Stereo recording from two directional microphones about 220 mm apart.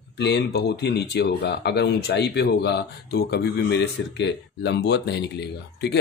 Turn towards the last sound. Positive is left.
turn(degrees=50)  # may be behind; listen again after turning